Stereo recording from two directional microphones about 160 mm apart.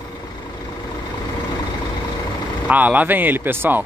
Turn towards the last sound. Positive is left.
turn(degrees=-15)  # may be behind; listen again after turning